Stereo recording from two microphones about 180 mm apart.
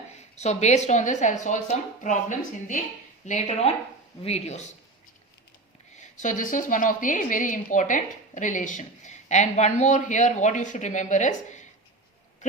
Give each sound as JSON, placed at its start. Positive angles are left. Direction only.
{"t": 0.3, "sound": "a woman's voice", "side_deg": 40}
{"t": 3.2, "sound": "a woman's voice", "side_deg": 40}
{"t": 5.9, "sound": "a woman's voice", "side_deg": 40}